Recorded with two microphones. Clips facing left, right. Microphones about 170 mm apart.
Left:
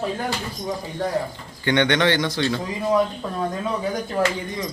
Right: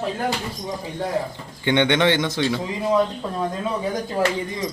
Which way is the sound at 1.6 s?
20° right (ahead or behind).